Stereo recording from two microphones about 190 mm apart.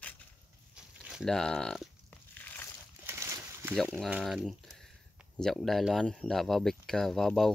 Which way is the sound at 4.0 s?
Centre (ahead or behind).